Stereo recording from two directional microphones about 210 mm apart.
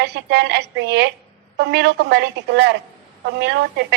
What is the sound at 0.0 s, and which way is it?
A woman's voice, 55° right (ahead or behind).